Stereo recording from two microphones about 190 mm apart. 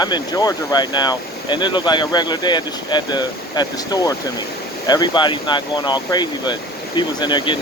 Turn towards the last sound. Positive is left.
turn(degrees=25)  # may be behind; listen again after turning